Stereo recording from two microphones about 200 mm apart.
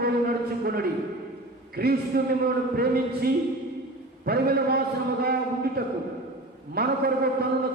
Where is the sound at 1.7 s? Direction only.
50° right (ahead or behind).